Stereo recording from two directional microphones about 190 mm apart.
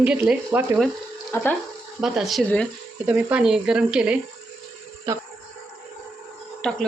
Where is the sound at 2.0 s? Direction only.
Centre (ahead or behind).